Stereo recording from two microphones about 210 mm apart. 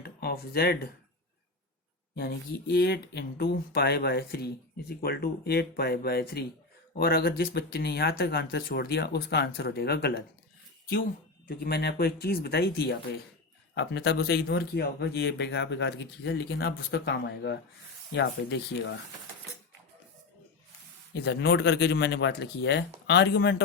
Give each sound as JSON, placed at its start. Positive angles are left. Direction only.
{"t": 0.0, "sound": "speech", "side_deg": 45}
{"t": 2.1, "sound": "speech", "side_deg": 45}
{"t": 11.4, "sound": "speech", "side_deg": 45}
{"t": 21.2, "sound": "speech", "side_deg": 50}